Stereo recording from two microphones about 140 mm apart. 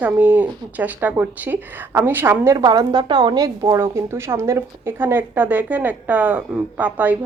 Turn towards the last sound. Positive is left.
turn(degrees=-10)  # may be behind; listen again after turning